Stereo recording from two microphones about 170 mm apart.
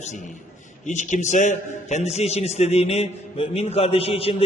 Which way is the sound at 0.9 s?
45° left (ahead or behind).